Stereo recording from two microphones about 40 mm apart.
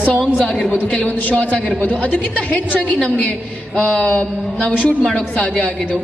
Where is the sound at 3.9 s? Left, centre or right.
Centre.